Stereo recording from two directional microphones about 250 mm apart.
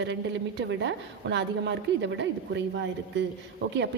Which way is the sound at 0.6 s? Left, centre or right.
Right.